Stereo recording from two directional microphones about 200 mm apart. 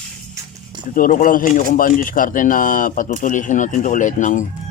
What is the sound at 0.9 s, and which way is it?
Speech, 45° left (ahead or behind).